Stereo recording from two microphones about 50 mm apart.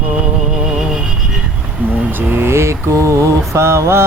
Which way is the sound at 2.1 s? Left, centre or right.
Right.